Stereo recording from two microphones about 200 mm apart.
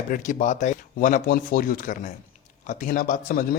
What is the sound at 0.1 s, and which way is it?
A man's voice, 40° left (ahead or behind).